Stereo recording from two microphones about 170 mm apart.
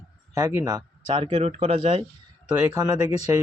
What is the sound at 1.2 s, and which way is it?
Speech, 35° right (ahead or behind).